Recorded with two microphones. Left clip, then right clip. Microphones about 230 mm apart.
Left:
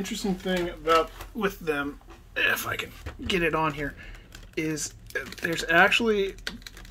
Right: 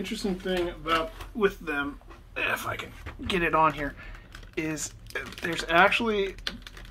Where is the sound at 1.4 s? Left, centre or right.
Left.